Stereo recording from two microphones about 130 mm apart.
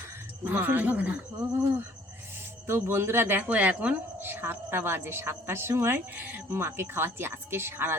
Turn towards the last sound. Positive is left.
turn(degrees=-15)  # may be behind; listen again after turning